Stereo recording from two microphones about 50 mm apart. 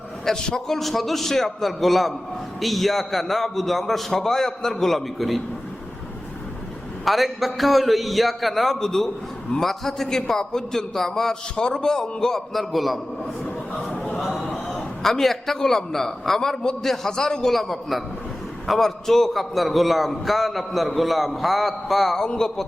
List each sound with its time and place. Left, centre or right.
0.3 s a man's voice: centre
0.8 s a man's voice: centre
7.0 s a man's voice: centre
12.5 s a man's voice: centre
14.2 s a sound: centre
14.8 s a man's voice: centre